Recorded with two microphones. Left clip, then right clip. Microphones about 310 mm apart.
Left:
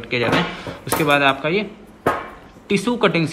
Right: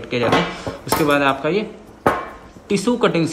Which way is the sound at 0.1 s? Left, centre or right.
Centre.